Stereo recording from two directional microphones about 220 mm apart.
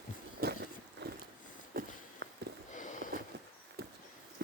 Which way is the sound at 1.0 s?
50° right (ahead or behind).